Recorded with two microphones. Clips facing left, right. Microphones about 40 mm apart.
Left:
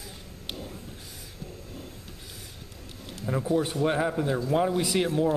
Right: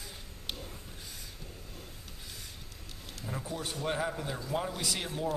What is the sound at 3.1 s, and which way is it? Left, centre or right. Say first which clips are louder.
A man's voice: left 12 dB; centre.